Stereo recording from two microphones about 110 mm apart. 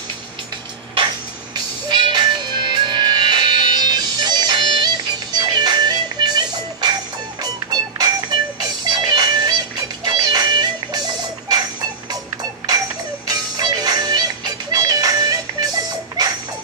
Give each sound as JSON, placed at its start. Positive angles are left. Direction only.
{"t": 1.9, "sound": "music", "side_deg": -40}
{"t": 13.3, "sound": "music", "side_deg": -40}